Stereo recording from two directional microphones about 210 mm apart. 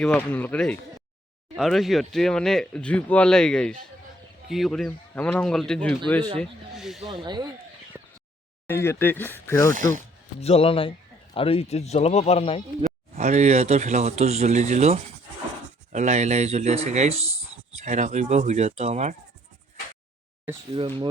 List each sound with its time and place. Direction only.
0.0 s speech: 5° left (ahead or behind)
7.9 s a sound: 10° right (ahead or behind)
8.6 s speech: 10° left (ahead or behind)
9.7 s speech: 40° right (ahead or behind)
10.4 s speech: 30° left (ahead or behind)
12.8 s speech: 35° right (ahead or behind)
20.7 s speech: 25° right (ahead or behind)